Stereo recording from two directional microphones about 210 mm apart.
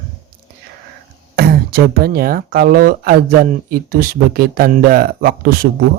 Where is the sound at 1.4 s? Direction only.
45° right (ahead or behind).